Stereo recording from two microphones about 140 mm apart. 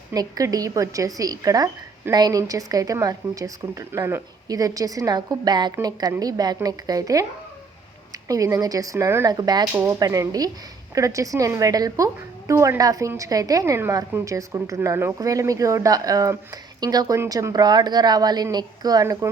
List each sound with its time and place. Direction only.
0.1 s a woman's voice: 25° right (ahead or behind)